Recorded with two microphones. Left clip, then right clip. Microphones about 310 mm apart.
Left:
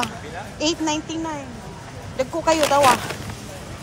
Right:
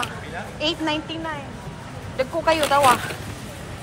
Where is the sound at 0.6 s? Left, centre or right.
Centre.